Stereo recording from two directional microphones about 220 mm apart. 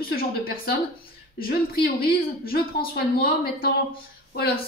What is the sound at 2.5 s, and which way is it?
A woman's voice, 45° left (ahead or behind).